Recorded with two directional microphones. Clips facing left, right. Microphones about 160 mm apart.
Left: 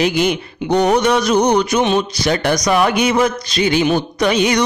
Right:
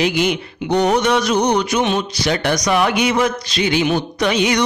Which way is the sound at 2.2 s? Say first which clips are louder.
Left 2 dB; 40° left (ahead or behind).